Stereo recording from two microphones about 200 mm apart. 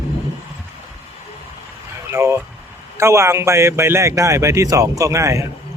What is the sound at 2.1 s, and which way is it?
Speech, 15° right (ahead or behind).